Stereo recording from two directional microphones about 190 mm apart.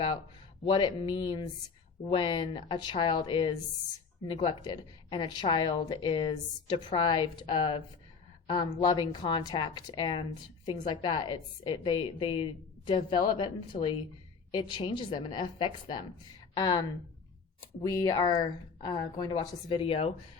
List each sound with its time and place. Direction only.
0.6 s a woman's voice: 25° left (ahead or behind)
17.8 s a woman's voice: 20° left (ahead or behind)